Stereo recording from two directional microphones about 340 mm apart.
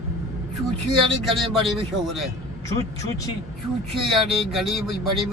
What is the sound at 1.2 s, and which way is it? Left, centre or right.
Speech, centre.